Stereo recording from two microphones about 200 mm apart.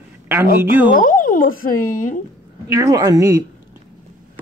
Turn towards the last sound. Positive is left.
turn(degrees=-15)  # may be behind; listen again after turning